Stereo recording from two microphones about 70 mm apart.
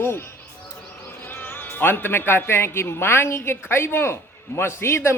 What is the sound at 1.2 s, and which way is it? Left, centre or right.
A man's voice, left.